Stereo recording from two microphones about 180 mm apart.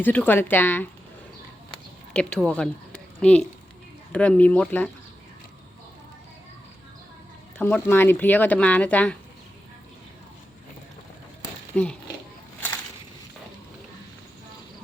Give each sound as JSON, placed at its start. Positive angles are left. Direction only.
{"t": 0.0, "sound": "speech", "side_deg": 10}
{"t": 2.1, "sound": "speech", "side_deg": 5}
{"t": 7.6, "sound": "speech", "side_deg": 10}
{"t": 11.7, "sound": "speech", "side_deg": 10}
{"t": 12.5, "sound": "slosh", "side_deg": 10}